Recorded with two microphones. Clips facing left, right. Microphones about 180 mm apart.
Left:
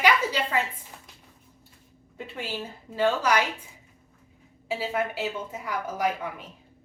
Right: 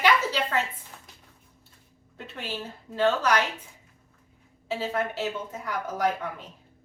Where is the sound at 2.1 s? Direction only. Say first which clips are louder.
Left 2 dB; 10° left (ahead or behind).